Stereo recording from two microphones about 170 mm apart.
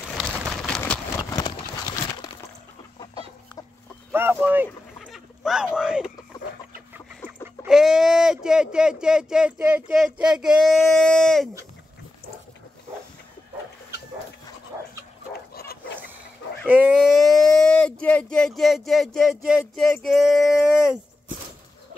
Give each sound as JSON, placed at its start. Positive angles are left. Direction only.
{"t": 0.2, "sound": "bird", "side_deg": -5}
{"t": 1.3, "sound": "clip-clop", "side_deg": 25}
{"t": 3.0, "sound": "chicken", "side_deg": 25}
{"t": 4.1, "sound": "speech", "side_deg": -15}
{"t": 4.6, "sound": "a sound", "side_deg": 0}
{"t": 7.6, "sound": "speech", "side_deg": -5}
{"t": 15.5, "sound": "dog", "side_deg": 65}
{"t": 16.6, "sound": "speech", "side_deg": -10}